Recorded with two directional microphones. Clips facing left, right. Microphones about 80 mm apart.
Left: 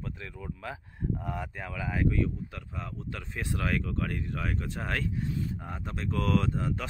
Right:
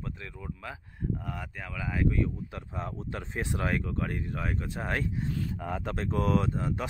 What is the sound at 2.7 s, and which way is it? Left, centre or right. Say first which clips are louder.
Speech: right 4 dB; right.